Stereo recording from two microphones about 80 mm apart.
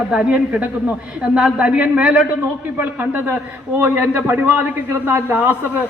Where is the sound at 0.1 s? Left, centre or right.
Centre.